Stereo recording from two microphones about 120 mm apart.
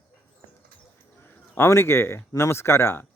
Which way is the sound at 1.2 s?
20° left (ahead or behind).